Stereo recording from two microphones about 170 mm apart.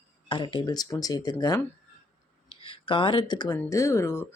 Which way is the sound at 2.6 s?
30° left (ahead or behind).